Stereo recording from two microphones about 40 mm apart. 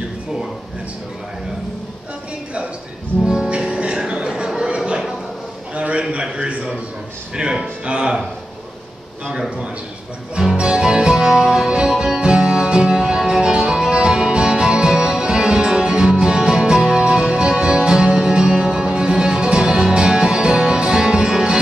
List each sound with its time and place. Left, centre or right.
3.4 s music: right
4.6 s a sound: right
6.3 s a man's voice: right
7.8 s a man's voice: right
10.6 s music: right